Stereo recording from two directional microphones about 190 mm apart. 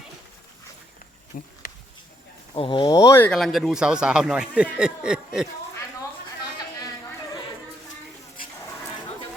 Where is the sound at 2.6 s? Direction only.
25° left (ahead or behind); by 5.5 s 5° right (ahead or behind).